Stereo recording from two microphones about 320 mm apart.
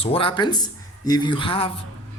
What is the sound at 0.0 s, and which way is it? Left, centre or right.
Speech, centre.